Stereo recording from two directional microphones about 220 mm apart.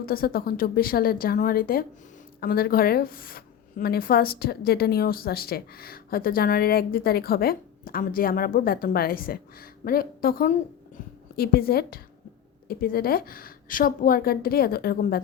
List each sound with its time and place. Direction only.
0.0 s speech: 40° left (ahead or behind)